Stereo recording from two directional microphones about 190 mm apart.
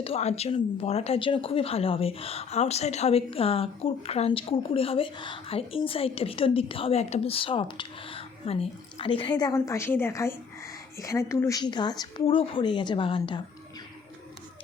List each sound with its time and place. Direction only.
0.0 s speech: 35° left (ahead or behind)